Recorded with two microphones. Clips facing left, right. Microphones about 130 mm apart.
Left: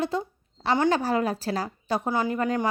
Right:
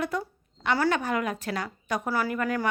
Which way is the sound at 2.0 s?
20° left (ahead or behind).